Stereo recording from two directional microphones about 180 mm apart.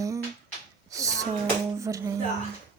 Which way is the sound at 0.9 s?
20° right (ahead or behind).